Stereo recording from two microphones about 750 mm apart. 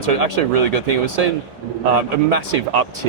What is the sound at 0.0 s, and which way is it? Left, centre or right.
Speech, right.